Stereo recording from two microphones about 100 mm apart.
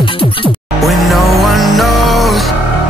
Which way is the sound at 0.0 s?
60° left (ahead or behind).